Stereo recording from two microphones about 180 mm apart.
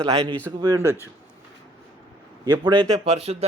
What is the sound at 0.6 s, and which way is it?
Speech, 20° right (ahead or behind).